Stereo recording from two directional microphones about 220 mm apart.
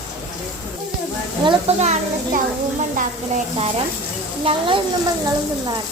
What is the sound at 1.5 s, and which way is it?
Speech, 30° right (ahead or behind).